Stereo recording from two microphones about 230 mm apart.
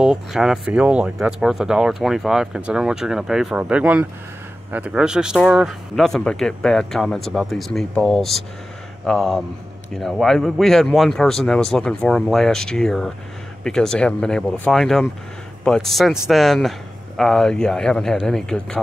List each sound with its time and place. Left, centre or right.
0.0 s speech: centre